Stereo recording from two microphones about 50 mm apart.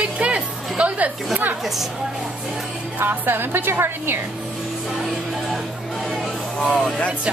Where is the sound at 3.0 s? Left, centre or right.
Right.